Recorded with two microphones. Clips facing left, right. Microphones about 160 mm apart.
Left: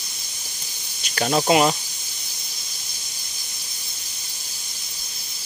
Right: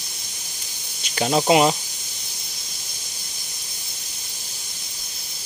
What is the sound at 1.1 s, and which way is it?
Speech, 15° right (ahead or behind).